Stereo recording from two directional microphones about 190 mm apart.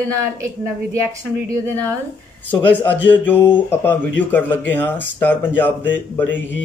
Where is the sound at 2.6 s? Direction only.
10° left (ahead or behind).